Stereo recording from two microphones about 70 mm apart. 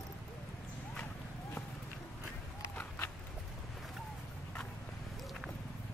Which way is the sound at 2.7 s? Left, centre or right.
Left.